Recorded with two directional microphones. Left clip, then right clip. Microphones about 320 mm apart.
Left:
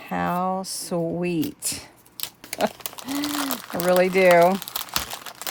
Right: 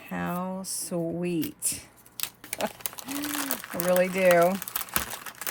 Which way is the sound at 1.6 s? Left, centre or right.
Left.